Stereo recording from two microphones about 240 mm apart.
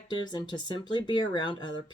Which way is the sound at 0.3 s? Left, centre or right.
Centre.